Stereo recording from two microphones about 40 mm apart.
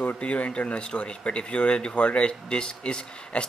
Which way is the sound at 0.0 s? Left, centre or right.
Left.